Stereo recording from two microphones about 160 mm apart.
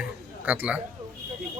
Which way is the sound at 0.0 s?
10° right (ahead or behind).